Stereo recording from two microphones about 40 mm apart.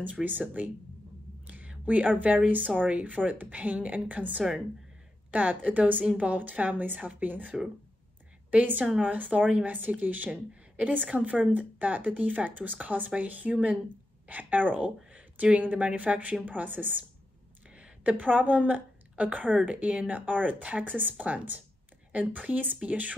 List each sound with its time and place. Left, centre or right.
0.0 s speech: right
1.7 s a woman's voice: right
17.6 s a sound: right
18.1 s a woman's voice: right